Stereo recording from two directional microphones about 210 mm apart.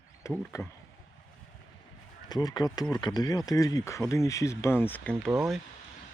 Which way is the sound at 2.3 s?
20° left (ahead or behind).